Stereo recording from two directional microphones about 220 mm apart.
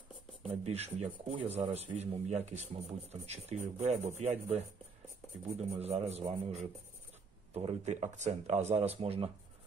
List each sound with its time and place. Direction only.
0.7 s speech: 30° right (ahead or behind)
5.8 s speech: 30° right (ahead or behind)